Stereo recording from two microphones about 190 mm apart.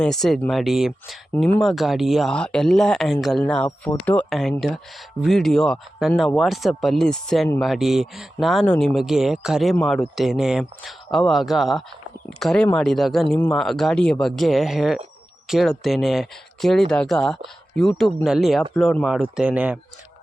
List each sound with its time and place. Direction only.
0.0 s speech: centre (ahead or behind)